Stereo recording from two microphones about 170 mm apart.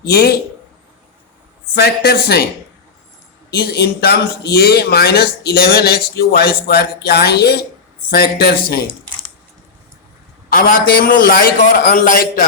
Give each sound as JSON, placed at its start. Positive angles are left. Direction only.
{"t": 0.0, "sound": "a man's voice", "side_deg": 65}
{"t": 1.7, "sound": "a man's voice", "side_deg": 70}
{"t": 3.5, "sound": "a man's voice", "side_deg": 70}
{"t": 10.5, "sound": "a man's voice", "side_deg": 60}